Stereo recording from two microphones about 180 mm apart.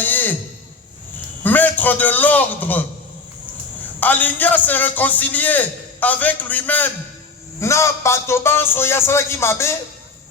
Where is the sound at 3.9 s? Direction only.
10° left (ahead or behind).